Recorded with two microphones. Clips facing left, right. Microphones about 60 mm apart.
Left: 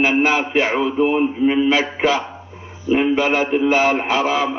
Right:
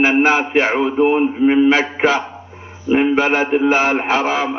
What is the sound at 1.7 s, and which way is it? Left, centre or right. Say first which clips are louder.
Mantra: right 2 dB; right.